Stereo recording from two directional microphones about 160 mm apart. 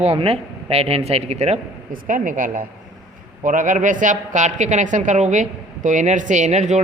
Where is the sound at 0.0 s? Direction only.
40° right (ahead or behind).